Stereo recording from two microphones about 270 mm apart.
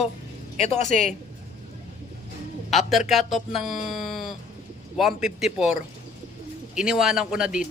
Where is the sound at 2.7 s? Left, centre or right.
Centre.